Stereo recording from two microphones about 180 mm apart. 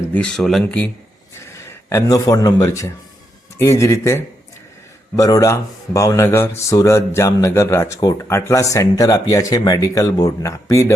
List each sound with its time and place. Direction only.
0.0 s speech: 10° left (ahead or behind)
1.9 s a man's voice: 20° left (ahead or behind)